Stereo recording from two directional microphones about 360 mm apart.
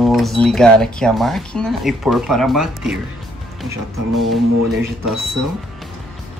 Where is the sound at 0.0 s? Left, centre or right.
Centre.